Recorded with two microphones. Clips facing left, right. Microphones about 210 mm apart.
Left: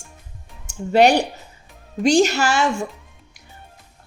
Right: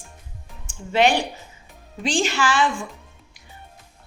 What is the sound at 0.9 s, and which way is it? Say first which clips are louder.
A woman's voice: left 4 dB; 40° left (ahead or behind).